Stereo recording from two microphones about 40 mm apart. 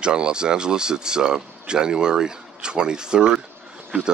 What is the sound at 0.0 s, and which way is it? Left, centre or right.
Speech, right.